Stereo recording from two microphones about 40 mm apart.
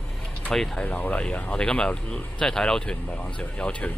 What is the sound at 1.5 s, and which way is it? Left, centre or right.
Speech, left.